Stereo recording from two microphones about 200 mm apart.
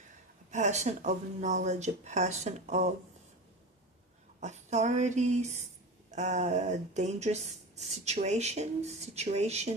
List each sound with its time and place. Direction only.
0.5 s speech: 35° right (ahead or behind)
4.4 s speech: 35° right (ahead or behind)